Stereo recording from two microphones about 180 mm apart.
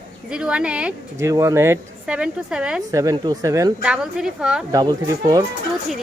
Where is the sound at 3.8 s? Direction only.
5° right (ahead or behind).